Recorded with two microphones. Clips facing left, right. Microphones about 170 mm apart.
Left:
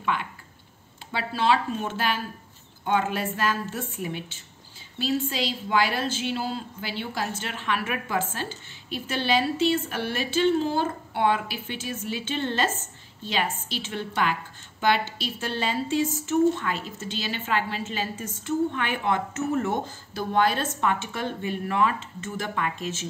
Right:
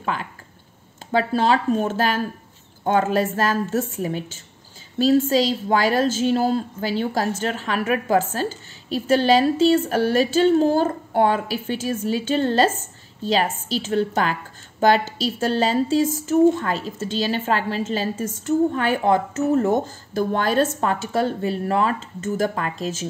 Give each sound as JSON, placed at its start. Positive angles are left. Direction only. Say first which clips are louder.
{"t": 0.0, "sound": "a woman's voice", "louder": "right 1 dB", "side_deg": -40}